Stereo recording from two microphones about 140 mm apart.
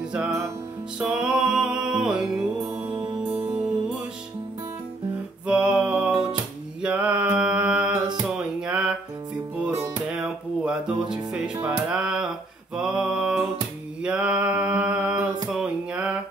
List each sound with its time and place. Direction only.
0.9 s music: 5° right (ahead or behind)
5.5 s music: 10° right (ahead or behind)
6.8 s mantra: 10° right (ahead or behind)
8.5 s music: 5° right (ahead or behind)
10.0 s music: 5° right (ahead or behind)
12.7 s mantra: 5° right (ahead or behind)